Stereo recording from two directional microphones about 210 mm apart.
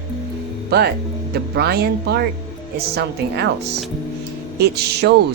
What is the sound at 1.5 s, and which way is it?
A woman's voice, 50° right (ahead or behind).